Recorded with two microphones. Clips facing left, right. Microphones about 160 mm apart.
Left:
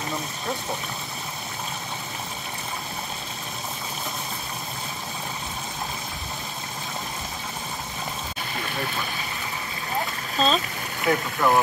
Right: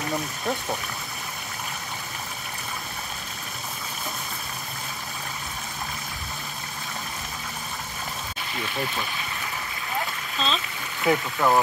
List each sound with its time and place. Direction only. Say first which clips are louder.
10.3 s speech: left 6 dB; 40° left (ahead or behind)
11.1 s speech: even; 5° right (ahead or behind)